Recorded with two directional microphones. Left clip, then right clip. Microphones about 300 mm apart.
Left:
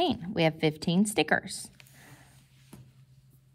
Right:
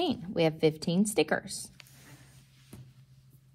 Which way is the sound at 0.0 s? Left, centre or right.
Left.